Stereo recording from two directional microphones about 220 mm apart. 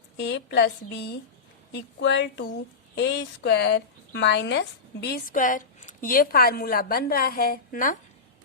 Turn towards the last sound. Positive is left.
turn(degrees=40)  # may be behind; listen again after turning